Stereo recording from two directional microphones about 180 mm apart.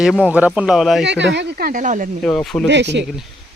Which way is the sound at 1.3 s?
50° right (ahead or behind).